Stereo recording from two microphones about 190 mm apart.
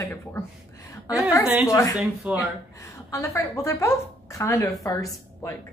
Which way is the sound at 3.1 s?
15° left (ahead or behind).